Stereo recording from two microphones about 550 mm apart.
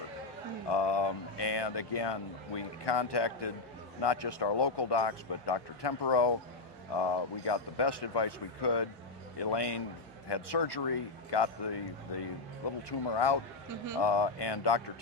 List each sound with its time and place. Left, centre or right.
0.7 s speech: left
12.9 s speech: left